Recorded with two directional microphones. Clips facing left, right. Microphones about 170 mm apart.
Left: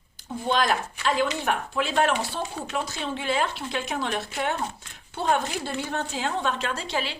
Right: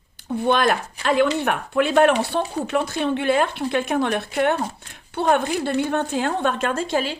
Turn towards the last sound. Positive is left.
turn(degrees=-45)  # may be behind; listen again after turning